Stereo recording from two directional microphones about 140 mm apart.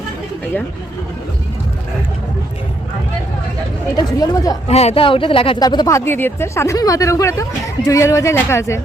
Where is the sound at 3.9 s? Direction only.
25° left (ahead or behind).